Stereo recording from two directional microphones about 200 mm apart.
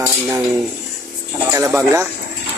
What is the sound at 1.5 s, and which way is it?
Speech, 15° right (ahead or behind).